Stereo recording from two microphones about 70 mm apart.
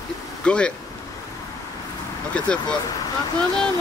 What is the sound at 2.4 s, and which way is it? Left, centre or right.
Speech, centre.